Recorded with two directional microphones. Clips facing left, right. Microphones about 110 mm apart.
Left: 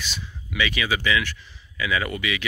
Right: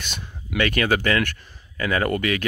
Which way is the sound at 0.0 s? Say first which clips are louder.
Even; 55° right (ahead or behind).